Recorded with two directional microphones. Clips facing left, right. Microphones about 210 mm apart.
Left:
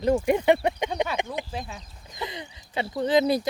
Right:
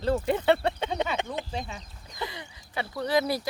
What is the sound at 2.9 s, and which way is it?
Speech, 20° left (ahead or behind).